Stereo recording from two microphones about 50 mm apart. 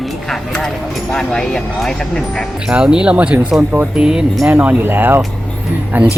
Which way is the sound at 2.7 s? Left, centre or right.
Centre.